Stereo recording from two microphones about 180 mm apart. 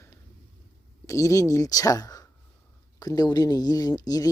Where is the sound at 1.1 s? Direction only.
15° left (ahead or behind).